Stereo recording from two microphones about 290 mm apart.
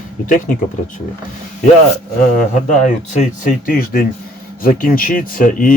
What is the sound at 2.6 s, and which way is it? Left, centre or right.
Speech, left.